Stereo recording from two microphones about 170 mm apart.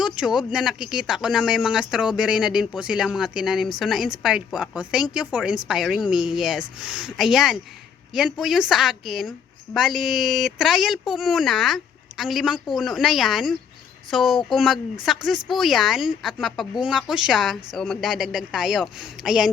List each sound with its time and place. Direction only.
0.0 s speech: 5° right (ahead or behind)